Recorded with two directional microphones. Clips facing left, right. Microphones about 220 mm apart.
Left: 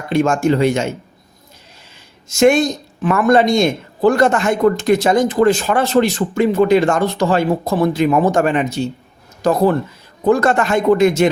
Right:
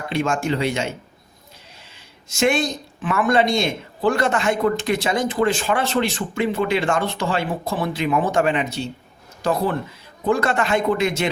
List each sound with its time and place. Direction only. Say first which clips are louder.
0.1 s speech: left 8 dB; 45° left (ahead or behind)
2.3 s speech: left 7 dB; 45° left (ahead or behind)